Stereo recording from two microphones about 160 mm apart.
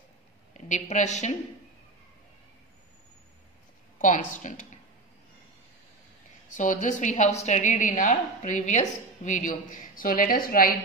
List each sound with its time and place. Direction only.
0.7 s a woman's voice: 45° left (ahead or behind)
4.0 s a woman's voice: 50° left (ahead or behind)
6.5 s a woman's voice: 50° left (ahead or behind)